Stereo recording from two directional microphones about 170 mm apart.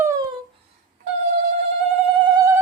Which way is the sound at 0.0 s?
20° right (ahead or behind).